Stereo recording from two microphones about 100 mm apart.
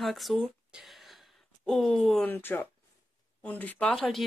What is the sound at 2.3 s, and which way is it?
Speech, 20° left (ahead or behind).